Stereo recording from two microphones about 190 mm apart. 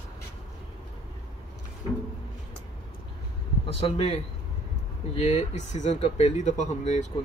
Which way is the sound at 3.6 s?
30° left (ahead or behind).